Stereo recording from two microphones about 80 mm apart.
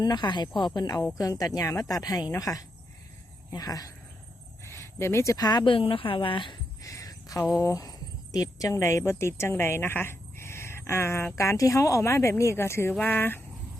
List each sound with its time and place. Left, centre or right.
0.0 s speech: left
4.6 s a sound: left
5.4 s speech: left
6.8 s a sound: left
7.6 s speech: left
12.9 s speech: left